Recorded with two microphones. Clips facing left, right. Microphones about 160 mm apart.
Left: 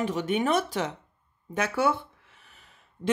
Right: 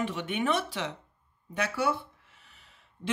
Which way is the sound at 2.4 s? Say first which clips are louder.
Left 3 dB; 50° left (ahead or behind).